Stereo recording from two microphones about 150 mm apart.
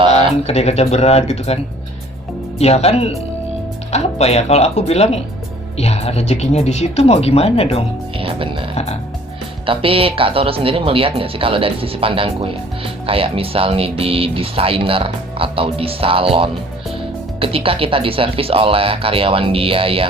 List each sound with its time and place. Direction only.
0.4 s speech: 45° left (ahead or behind)
2.6 s speech: 45° left (ahead or behind)
8.2 s music: 35° right (ahead or behind)
8.7 s speech: 45° left (ahead or behind)
9.6 s speech: 40° right (ahead or behind)